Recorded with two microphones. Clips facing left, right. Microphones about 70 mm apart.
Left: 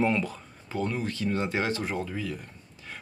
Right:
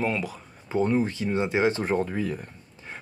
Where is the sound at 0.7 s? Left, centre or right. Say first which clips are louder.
Right 7 dB; right.